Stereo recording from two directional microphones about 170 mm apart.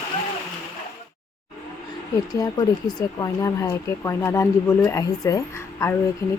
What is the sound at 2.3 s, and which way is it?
Speech, 20° left (ahead or behind).